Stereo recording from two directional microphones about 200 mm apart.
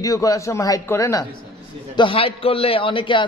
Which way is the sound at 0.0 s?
15° left (ahead or behind).